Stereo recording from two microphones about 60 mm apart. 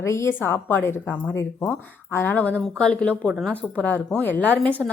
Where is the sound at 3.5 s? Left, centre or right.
Left.